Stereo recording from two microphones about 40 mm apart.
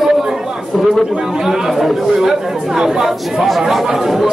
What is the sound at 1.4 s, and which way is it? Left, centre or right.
Speech, centre.